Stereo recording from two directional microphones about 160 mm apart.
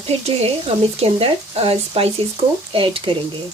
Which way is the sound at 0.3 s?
40° right (ahead or behind).